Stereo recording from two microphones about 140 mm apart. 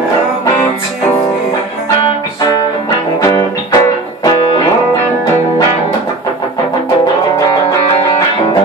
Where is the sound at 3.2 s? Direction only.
20° left (ahead or behind).